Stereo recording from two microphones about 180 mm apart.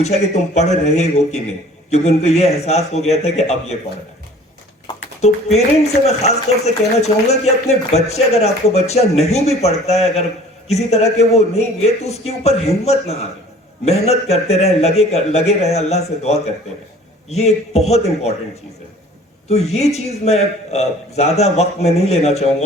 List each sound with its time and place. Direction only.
0.0 s speech: 40° left (ahead or behind)
5.2 s speech: 35° left (ahead or behind)
19.5 s speech: 35° left (ahead or behind)